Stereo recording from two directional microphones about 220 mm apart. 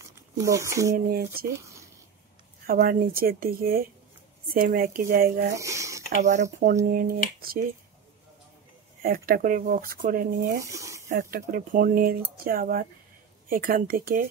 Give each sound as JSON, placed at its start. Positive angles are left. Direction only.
{"t": 0.0, "sound": "speech", "side_deg": -15}
{"t": 0.9, "sound": "speech", "side_deg": -40}
{"t": 2.6, "sound": "speech", "side_deg": -40}
{"t": 5.5, "sound": "a sound", "side_deg": -15}
{"t": 6.1, "sound": "speech", "side_deg": -35}
{"t": 9.0, "sound": "speech", "side_deg": -40}
{"t": 10.6, "sound": "speech", "side_deg": -15}
{"t": 11.1, "sound": "speech", "side_deg": -40}